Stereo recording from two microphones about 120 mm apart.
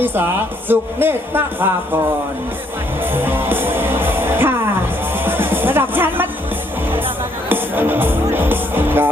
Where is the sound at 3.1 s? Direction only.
15° right (ahead or behind).